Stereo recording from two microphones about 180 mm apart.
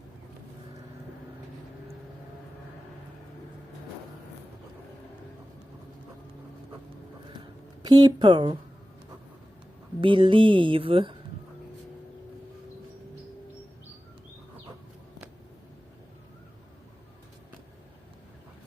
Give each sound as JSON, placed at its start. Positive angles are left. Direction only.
{"t": 7.9, "sound": "speech", "side_deg": -25}
{"t": 10.0, "sound": "speech", "side_deg": -25}